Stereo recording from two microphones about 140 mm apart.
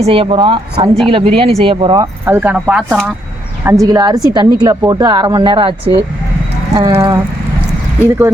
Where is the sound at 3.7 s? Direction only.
25° right (ahead or behind).